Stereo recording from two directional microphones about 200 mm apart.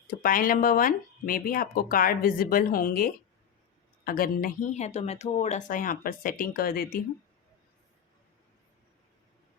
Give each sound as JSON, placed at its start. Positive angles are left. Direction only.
{"t": 0.2, "sound": "speech", "side_deg": 45}